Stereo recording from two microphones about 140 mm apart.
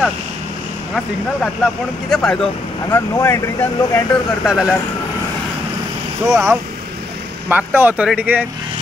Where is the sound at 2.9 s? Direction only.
20° left (ahead or behind).